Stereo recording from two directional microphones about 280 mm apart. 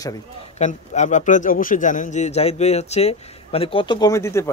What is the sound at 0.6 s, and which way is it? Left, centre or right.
A man's voice, left.